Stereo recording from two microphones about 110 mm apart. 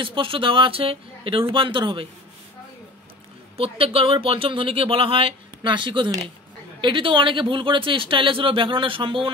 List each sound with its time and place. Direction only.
0.0 s speech: 50° right (ahead or behind)
3.5 s speech: 60° right (ahead or behind)